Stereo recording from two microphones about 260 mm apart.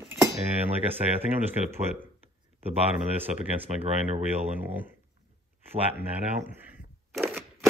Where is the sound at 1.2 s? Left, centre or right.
Centre.